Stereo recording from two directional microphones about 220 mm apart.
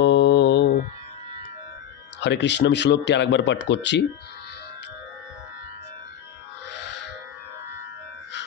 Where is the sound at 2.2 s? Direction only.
50° left (ahead or behind).